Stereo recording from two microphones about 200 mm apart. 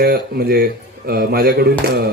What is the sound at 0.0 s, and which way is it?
A man's voice, 50° right (ahead or behind).